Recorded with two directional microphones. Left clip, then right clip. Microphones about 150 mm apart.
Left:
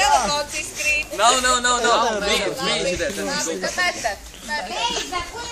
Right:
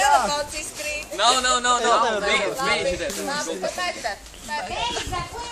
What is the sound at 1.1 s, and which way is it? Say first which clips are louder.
Speech: even; 45° left (ahead or behind).